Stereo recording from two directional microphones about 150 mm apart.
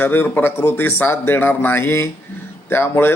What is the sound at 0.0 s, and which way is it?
A man's voice, 15° left (ahead or behind).